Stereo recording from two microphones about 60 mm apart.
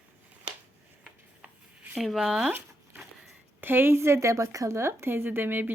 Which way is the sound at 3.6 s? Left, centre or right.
Right.